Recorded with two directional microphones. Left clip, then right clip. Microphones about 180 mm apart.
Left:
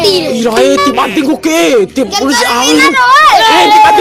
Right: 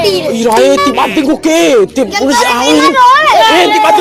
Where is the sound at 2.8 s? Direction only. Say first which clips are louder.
Left 1 dB; 55° left (ahead or behind).